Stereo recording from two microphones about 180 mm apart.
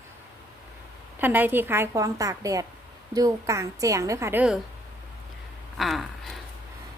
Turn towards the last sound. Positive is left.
turn(degrees=0)  # may be behind; listen again after turning